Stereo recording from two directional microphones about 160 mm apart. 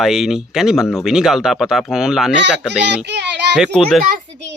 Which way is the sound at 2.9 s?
90° right.